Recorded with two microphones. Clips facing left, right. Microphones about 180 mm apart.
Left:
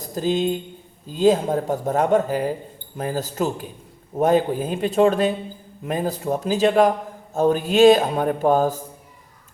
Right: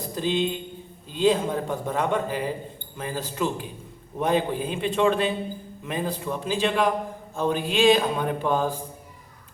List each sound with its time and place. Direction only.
0.1 s a man's voice: 45° left (ahead or behind)